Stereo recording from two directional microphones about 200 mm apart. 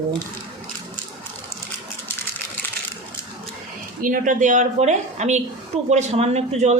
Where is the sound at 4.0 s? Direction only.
45° right (ahead or behind).